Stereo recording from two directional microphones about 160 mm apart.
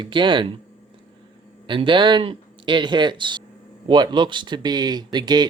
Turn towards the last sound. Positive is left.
turn(degrees=-25)  # may be behind; listen again after turning